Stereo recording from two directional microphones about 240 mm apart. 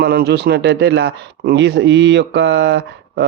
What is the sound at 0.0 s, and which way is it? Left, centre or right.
Speech, right.